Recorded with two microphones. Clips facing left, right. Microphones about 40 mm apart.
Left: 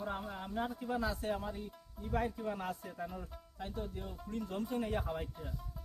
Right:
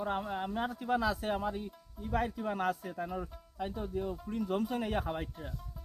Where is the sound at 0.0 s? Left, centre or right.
Right.